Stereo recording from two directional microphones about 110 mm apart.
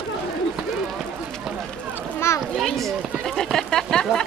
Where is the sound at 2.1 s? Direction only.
25° left (ahead or behind).